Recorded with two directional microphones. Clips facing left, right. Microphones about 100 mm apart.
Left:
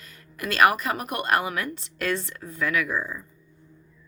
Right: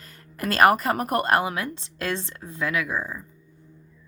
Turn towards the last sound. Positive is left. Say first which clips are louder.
# left 1 dB
turn(degrees=-20)  # may be behind; listen again after turning